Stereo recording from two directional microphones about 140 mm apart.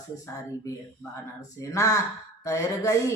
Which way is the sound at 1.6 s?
25° left (ahead or behind).